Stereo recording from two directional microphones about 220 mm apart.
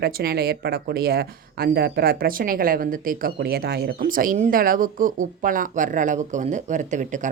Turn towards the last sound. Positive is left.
turn(degrees=-35)  # may be behind; listen again after turning